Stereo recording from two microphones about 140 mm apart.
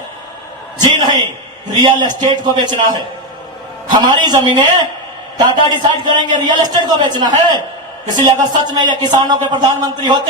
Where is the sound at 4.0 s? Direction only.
30° right (ahead or behind).